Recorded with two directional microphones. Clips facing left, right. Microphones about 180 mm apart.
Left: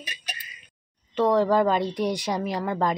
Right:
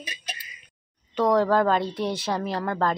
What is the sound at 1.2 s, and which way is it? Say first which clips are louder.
Speech: even; 10° left (ahead or behind).